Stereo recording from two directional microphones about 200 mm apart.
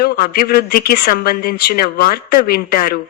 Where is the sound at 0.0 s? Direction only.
50° left (ahead or behind).